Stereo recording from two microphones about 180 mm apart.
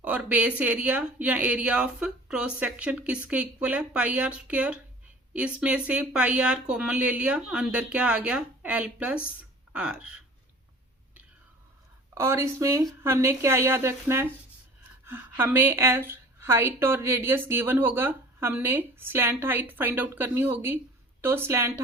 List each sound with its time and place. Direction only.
0.0 s a woman's voice: 5° right (ahead or behind)
12.1 s a woman's voice: 15° right (ahead or behind)